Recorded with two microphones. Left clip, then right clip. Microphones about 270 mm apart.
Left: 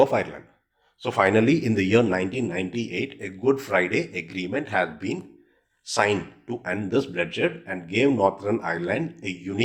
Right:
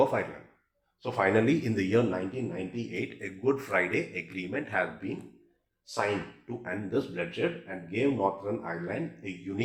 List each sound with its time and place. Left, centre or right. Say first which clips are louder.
0.0 s speech: left 6 dB; left
2.9 s speech: left 6 dB; left
5.8 s speech: left 8 dB; left